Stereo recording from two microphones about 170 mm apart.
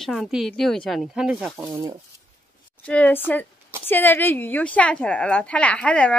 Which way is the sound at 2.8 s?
10° left (ahead or behind).